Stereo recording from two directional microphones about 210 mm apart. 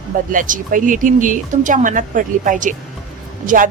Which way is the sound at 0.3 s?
40° right (ahead or behind).